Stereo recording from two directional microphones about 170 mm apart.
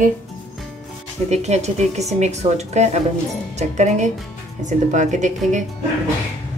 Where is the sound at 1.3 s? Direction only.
40° right (ahead or behind).